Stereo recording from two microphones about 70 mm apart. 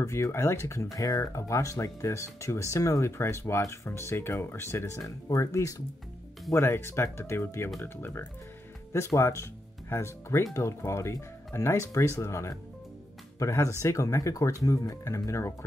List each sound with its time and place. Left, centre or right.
0.0 s speech: left
0.9 s speech: left
8.9 s speech: left